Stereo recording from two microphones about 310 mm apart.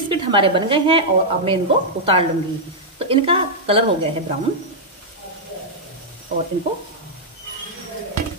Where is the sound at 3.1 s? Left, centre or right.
Centre.